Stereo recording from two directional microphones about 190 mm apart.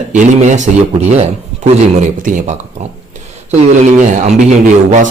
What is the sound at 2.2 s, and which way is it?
A man's voice, 45° right (ahead or behind).